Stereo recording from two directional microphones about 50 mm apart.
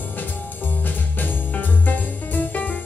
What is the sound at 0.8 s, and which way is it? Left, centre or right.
Music, left.